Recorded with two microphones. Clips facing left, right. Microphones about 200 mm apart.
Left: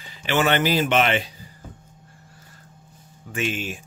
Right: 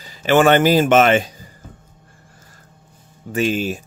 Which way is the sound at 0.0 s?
40° right (ahead or behind).